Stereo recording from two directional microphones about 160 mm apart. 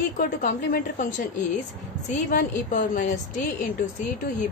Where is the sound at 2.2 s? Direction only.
55° left (ahead or behind).